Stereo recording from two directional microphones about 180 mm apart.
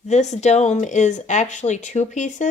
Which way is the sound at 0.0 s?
40° left (ahead or behind).